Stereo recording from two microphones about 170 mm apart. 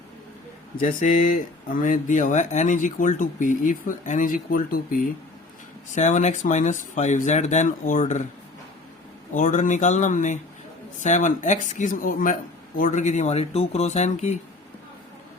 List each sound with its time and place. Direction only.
0.8 s speech: 50° left (ahead or behind)
9.3 s speech: 45° left (ahead or behind)